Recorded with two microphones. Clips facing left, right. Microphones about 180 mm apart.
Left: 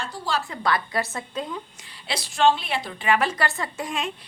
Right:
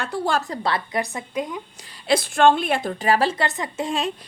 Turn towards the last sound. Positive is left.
turn(degrees=-30)  # may be behind; listen again after turning